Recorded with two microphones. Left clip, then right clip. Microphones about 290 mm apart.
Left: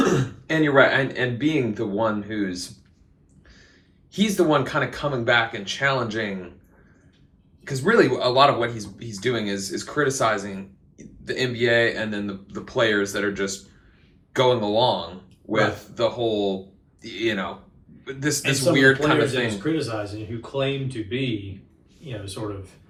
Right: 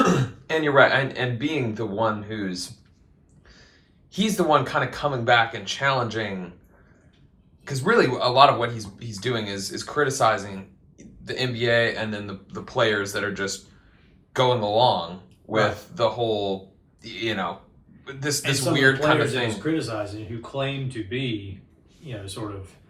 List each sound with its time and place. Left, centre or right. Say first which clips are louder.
0.4 s speech: even; centre
4.1 s speech: even; centre
7.6 s speech: left 2 dB; centre
19.3 s speech: left 1 dB; centre